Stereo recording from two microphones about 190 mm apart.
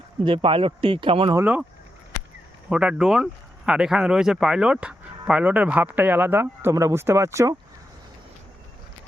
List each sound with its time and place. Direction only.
0.3 s speech: 25° right (ahead or behind)
1.4 s speech: 10° right (ahead or behind)
2.6 s speech: 5° right (ahead or behind)